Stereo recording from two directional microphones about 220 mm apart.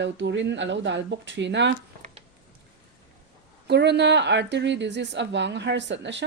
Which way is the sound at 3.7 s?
50° right (ahead or behind).